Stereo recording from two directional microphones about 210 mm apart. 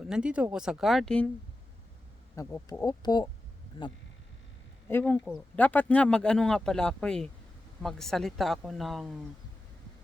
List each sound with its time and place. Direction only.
0.0 s speech: 5° right (ahead or behind)
2.3 s speech: 15° left (ahead or behind)
4.9 s speech: 10° left (ahead or behind)